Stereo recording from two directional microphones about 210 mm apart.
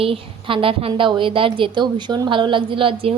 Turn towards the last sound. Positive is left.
turn(degrees=-25)  # may be behind; listen again after turning